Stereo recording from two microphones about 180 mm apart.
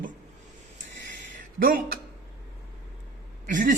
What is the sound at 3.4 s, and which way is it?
Speech, 45° right (ahead or behind).